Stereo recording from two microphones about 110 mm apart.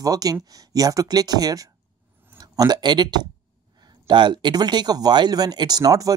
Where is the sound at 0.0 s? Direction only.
35° right (ahead or behind).